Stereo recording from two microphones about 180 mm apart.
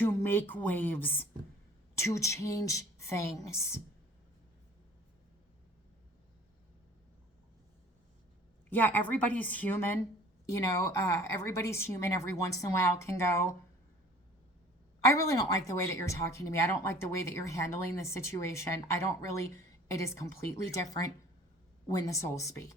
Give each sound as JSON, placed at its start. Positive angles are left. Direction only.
{"t": 0.0, "sound": "speech", "side_deg": 10}
{"t": 8.7, "sound": "speech", "side_deg": 10}
{"t": 15.0, "sound": "speech", "side_deg": 15}